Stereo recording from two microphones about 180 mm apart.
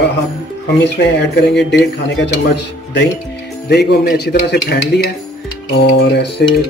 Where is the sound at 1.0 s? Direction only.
70° left (ahead or behind).